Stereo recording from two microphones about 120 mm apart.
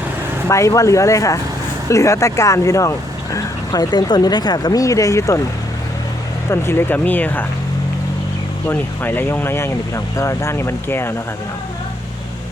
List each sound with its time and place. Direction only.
0.4 s speech: 25° left (ahead or behind)
6.5 s speech: 20° left (ahead or behind)
8.6 s speech: 15° left (ahead or behind)